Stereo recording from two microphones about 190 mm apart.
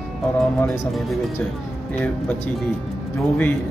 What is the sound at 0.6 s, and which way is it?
Speech, 15° left (ahead or behind).